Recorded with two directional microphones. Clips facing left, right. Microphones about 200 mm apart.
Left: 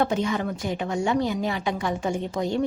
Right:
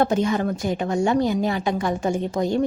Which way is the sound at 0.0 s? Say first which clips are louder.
Right 4 dB; 40° right (ahead or behind).